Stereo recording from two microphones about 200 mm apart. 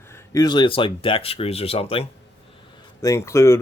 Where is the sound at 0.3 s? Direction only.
20° left (ahead or behind).